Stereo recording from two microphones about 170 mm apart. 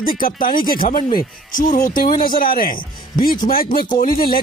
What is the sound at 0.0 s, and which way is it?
Speech, 55° left (ahead or behind).